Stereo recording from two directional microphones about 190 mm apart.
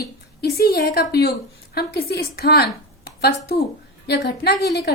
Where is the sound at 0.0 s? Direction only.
55° left (ahead or behind).